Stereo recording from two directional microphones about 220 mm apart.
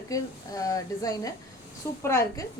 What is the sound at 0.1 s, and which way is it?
A woman's voice, 15° left (ahead or behind).